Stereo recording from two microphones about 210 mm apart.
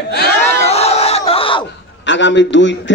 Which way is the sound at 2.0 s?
60° left (ahead or behind).